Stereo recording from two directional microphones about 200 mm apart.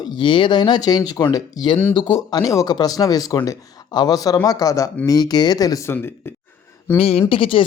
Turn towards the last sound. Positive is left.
turn(degrees=25)  # may be behind; listen again after turning